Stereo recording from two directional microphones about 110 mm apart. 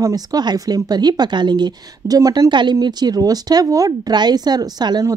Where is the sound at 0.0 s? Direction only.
35° right (ahead or behind).